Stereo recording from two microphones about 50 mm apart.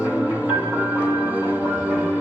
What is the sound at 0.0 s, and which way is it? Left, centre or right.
Music, right.